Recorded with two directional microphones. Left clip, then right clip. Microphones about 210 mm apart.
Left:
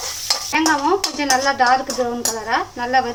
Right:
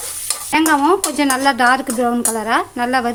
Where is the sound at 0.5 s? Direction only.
55° right (ahead or behind).